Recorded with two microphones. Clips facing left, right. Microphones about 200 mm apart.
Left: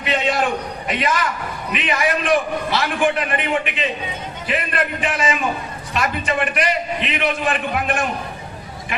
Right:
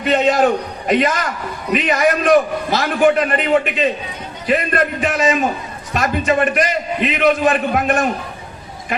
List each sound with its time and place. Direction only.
0.0 s a man's voice: 40° right (ahead or behind)